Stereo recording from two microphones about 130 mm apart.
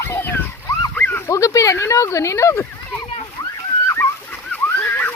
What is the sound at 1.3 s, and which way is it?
Speech, 25° left (ahead or behind).